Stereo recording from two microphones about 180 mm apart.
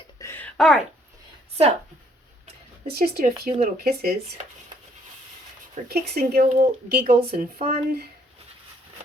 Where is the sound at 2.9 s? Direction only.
60° right (ahead or behind).